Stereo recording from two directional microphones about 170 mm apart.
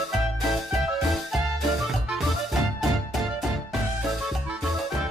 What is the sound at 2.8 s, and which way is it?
Music, centre (ahead or behind).